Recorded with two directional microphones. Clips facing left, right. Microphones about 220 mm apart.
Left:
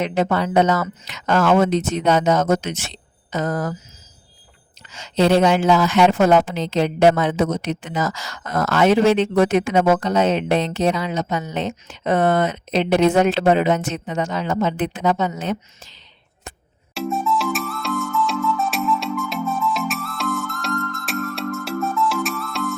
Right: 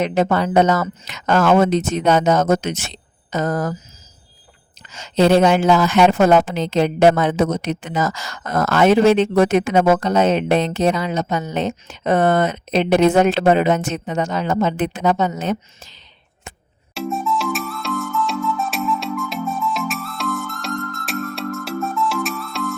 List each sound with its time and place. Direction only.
0.0 s a woman's voice: 40° right (ahead or behind)
4.9 s a woman's voice: 45° right (ahead or behind)
16.9 s music: centre (ahead or behind)